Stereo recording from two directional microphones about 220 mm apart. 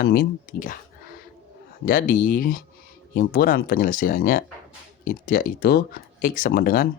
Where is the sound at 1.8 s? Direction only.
40° left (ahead or behind).